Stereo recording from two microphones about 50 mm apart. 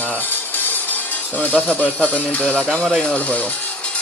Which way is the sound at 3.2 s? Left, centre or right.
Left.